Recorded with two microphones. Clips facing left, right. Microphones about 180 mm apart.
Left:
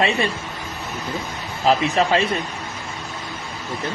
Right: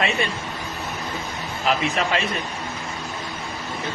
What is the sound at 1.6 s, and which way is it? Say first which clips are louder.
Speech: left 5 dB; 35° left (ahead or behind).